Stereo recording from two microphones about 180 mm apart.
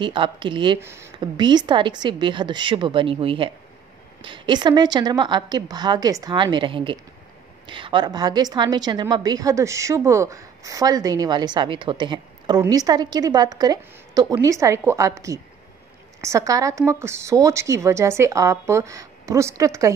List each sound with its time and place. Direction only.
0.0 s a woman's voice: 25° right (ahead or behind)
0.7 s a woman's voice: 15° right (ahead or behind)
1.2 s a woman's voice: 25° right (ahead or behind)